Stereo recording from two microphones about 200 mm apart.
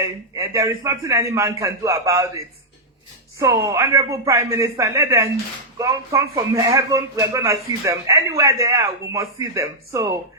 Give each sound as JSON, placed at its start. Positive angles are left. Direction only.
{"t": 0.0, "sound": "a man's voice", "side_deg": -15}